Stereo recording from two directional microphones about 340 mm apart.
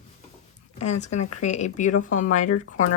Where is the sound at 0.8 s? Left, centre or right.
Centre.